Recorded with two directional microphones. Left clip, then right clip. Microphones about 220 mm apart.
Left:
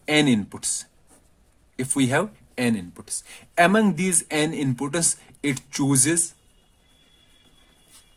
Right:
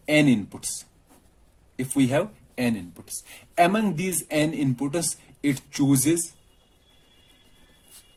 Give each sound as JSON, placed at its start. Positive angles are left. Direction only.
{"t": 0.1, "sound": "speech", "side_deg": 50}
{"t": 1.7, "sound": "speech", "side_deg": 50}